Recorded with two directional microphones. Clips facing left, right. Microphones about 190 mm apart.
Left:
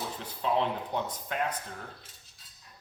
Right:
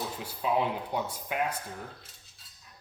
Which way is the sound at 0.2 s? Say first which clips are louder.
Even; 10° right (ahead or behind).